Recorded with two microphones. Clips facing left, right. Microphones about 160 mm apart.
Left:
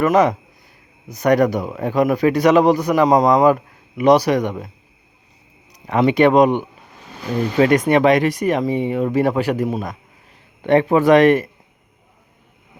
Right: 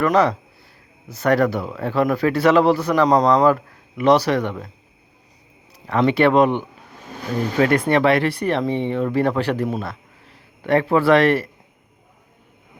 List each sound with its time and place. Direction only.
0.0 s a man's voice: 20° left (ahead or behind)
5.7 s a man's voice: 15° left (ahead or behind)